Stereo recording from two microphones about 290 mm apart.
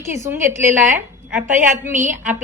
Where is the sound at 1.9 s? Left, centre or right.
Right.